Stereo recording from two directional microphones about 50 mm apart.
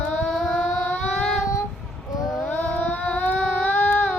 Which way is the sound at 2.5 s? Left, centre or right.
Left.